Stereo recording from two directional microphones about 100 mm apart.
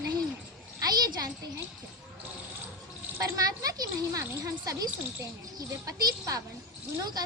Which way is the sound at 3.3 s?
40° right (ahead or behind).